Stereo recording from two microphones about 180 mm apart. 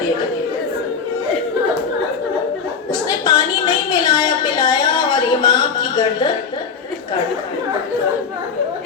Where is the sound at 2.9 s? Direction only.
20° left (ahead or behind).